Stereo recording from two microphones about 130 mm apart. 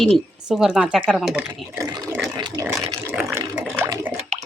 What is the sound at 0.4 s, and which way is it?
Speech, centre (ahead or behind).